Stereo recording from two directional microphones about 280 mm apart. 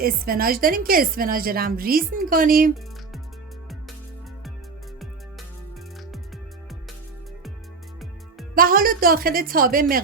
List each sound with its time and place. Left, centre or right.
0.0 s a woman's voice: right
8.5 s a woman's voice: right